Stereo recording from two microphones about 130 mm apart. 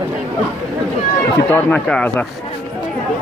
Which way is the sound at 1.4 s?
10° left (ahead or behind).